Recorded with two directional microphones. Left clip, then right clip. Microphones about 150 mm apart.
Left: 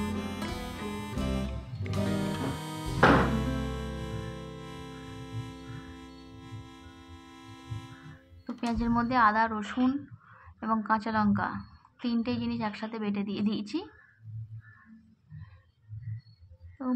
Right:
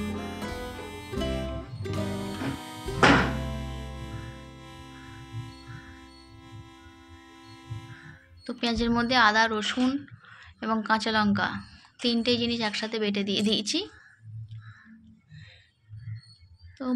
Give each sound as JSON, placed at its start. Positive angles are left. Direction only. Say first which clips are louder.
{"t": 0.0, "sound": "music", "louder": "right 1 dB", "side_deg": 0}
{"t": 8.5, "sound": "a woman's voice", "louder": "right 4 dB", "side_deg": -20}
{"t": 9.5, "sound": "a woman's voice", "louder": "right 3 dB", "side_deg": -35}
{"t": 16.8, "sound": "a sound", "louder": "right 2 dB", "side_deg": -20}